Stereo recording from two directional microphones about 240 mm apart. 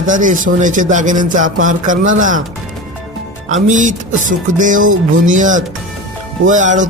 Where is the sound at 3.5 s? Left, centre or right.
Right.